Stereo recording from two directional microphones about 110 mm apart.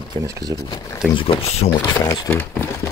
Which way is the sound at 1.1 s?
55° left (ahead or behind).